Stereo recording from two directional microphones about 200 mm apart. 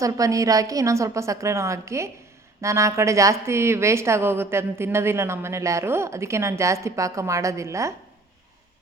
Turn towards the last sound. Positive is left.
turn(degrees=-15)  # may be behind; listen again after turning